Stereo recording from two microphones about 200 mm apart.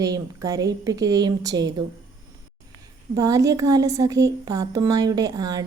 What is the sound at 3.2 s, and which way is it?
A woman's voice, 15° right (ahead or behind).